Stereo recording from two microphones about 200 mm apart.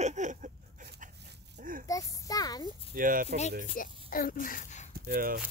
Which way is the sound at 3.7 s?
45° left (ahead or behind).